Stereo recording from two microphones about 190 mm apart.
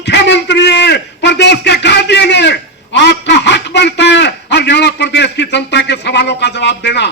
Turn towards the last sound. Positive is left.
turn(degrees=65)  # may be behind; listen again after turning